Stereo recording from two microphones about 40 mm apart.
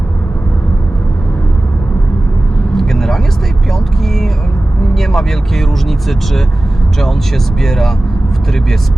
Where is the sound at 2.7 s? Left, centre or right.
Centre.